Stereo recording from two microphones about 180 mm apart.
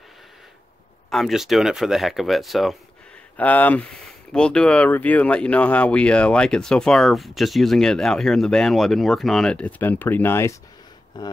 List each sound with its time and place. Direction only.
1.1 s speech: centre (ahead or behind); by 11.3 s 25° left (ahead or behind)